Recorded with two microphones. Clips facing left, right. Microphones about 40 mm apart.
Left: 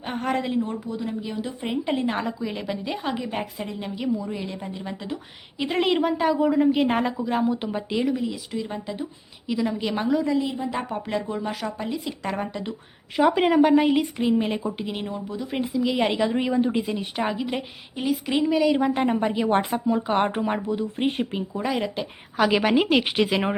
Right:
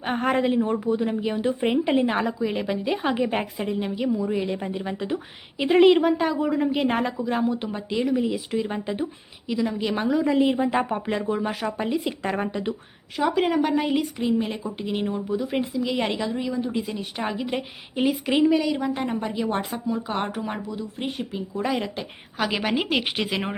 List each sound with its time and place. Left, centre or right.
0.0 s speech: right
1.8 s a woman's voice: centre
3.0 s a woman's voice: right; by 8.1 s centre
8.1 s speech: centre
9.5 s a woman's voice: centre
10.3 s a woman's voice: right
10.8 s a woman's voice: right
13.1 s speech: centre
14.8 s a woman's voice: centre
16.3 s speech: left
16.8 s a woman's voice: centre
18.8 s a woman's voice: centre
21.6 s a woman's voice: centre